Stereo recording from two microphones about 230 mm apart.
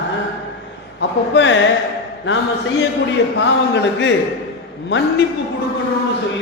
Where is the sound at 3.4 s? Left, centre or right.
Left.